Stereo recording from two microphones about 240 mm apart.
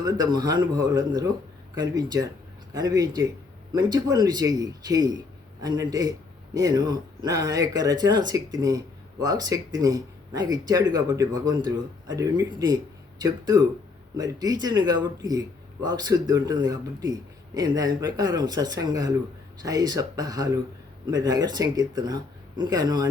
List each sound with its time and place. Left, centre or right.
0.0 s a man's voice: centre